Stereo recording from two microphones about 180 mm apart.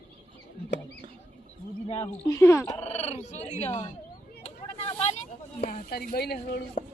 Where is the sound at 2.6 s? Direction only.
35° left (ahead or behind).